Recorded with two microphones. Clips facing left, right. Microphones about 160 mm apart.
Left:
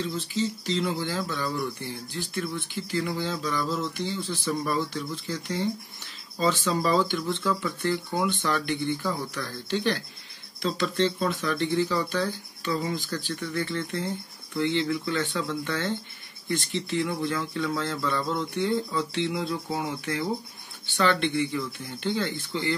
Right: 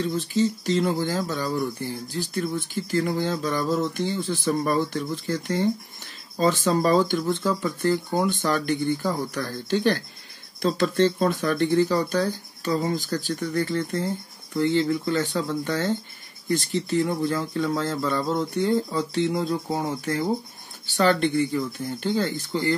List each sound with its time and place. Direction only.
0.0 s speech: 50° right (ahead or behind)